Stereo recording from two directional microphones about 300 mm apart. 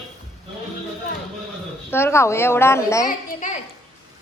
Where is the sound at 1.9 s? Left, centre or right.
Centre.